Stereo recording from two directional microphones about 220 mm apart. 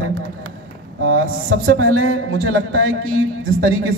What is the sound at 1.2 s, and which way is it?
A man's voice, 70° right (ahead or behind).